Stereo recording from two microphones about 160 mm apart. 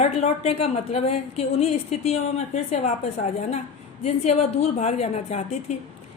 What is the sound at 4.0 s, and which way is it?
A woman's voice, 40° left (ahead or behind).